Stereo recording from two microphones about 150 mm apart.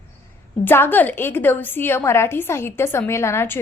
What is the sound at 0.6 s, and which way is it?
A woman's voice, 15° left (ahead or behind).